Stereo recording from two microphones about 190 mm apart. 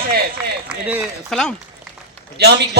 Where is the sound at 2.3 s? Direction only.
60° right (ahead or behind).